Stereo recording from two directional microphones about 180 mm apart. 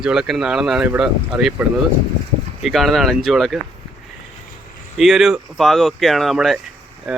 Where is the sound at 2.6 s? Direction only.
Centre (ahead or behind).